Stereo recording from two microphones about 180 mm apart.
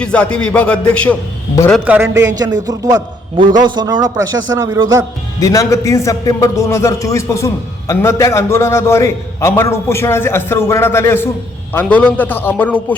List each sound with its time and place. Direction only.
0.0 s a man's voice: 5° left (ahead or behind)
1.7 s a man's voice: 10° right (ahead or behind)
2.2 s a man's voice: 20° right (ahead or behind)
5.4 s a man's voice: 20° left (ahead or behind)